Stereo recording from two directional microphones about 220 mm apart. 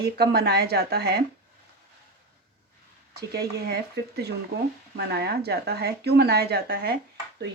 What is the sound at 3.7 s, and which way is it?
Speech, 50° right (ahead or behind).